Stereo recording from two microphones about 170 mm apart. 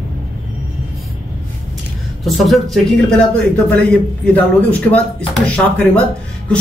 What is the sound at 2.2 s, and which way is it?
A man's voice, centre (ahead or behind).